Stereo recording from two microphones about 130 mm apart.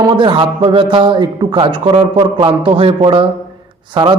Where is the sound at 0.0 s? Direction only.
40° right (ahead or behind).